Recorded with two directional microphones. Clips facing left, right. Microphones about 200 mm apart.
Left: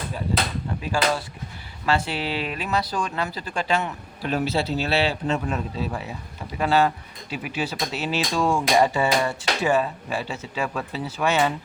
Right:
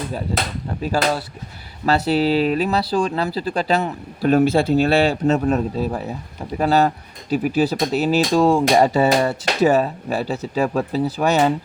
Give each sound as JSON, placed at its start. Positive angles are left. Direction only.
{"t": 1.8, "sound": "speech", "side_deg": -40}